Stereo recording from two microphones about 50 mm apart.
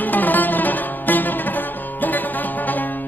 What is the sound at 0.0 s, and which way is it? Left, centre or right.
Music, left.